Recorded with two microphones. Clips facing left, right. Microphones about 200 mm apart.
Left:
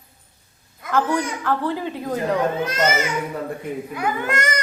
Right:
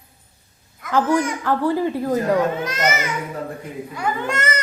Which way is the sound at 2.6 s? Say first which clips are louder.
Left 1 dB; 30° left (ahead or behind).